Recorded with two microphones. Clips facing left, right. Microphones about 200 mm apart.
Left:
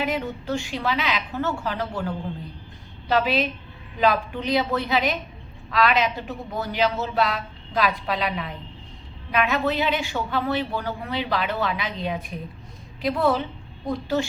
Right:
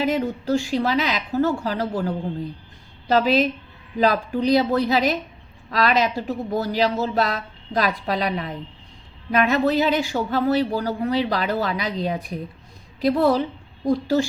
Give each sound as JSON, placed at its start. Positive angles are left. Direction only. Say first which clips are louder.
{"t": 0.0, "sound": "speech", "louder": "right 4 dB", "side_deg": -40}